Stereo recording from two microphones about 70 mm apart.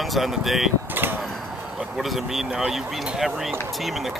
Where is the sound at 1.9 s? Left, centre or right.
Centre.